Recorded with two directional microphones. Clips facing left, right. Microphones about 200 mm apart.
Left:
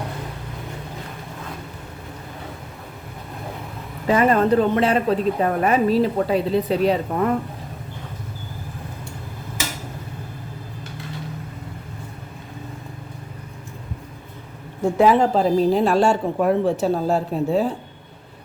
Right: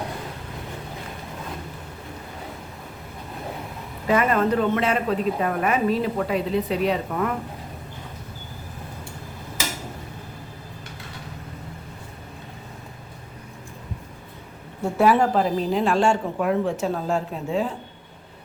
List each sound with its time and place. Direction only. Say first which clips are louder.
4.0 s speech: left 3 dB; 30° left (ahead or behind)
14.9 s speech: left 2 dB; 20° left (ahead or behind)
15.4 s speech: left 5 dB; 35° left (ahead or behind)